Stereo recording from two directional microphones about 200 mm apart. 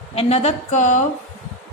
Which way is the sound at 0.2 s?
30° left (ahead or behind).